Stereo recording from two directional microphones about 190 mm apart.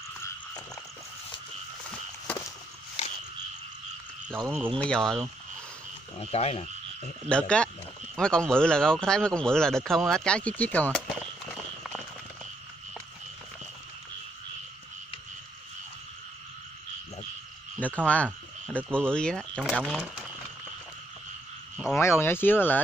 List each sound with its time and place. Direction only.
1.9 s a sound: 5° left (ahead or behind)
4.6 s speech: 5° left (ahead or behind)
6.1 s frog: 30° left (ahead or behind)
7.2 s speech: 5° left (ahead or behind)
17.7 s frog: 10° left (ahead or behind)
19.1 s speech: 5° left (ahead or behind)
21.9 s speech: 15° left (ahead or behind)